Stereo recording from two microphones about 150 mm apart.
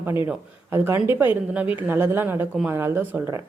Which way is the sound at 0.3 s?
15° right (ahead or behind).